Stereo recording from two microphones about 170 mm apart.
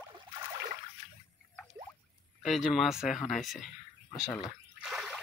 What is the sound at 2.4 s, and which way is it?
Speech, centre (ahead or behind).